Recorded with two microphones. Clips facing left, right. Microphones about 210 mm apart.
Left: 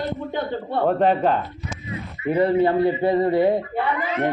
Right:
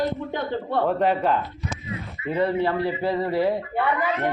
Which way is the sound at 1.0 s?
40° left (ahead or behind).